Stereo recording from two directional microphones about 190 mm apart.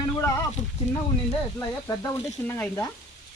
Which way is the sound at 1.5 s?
15° left (ahead or behind).